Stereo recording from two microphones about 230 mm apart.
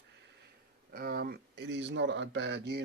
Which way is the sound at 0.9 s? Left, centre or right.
Right.